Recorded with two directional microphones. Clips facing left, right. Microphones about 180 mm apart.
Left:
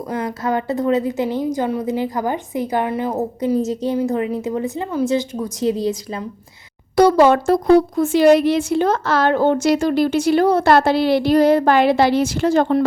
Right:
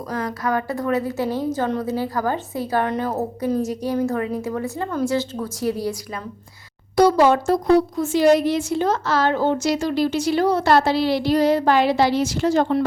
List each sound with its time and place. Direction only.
0.1 s a woman's voice: 25° left (ahead or behind)
6.9 s a woman's voice: 60° left (ahead or behind)